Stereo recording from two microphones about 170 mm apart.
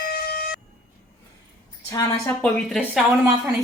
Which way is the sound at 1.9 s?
20° left (ahead or behind).